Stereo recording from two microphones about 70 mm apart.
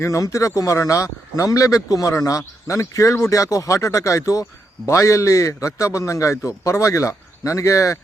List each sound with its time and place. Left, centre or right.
0.0 s a man's voice: left